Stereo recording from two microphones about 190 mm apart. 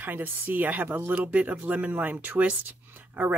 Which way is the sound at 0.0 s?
10° right (ahead or behind).